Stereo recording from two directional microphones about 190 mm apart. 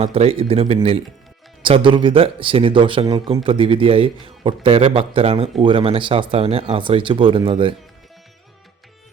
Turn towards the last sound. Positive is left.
turn(degrees=-25)  # may be behind; listen again after turning